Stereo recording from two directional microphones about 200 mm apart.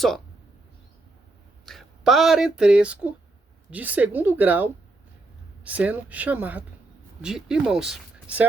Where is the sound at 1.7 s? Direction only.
Centre (ahead or behind).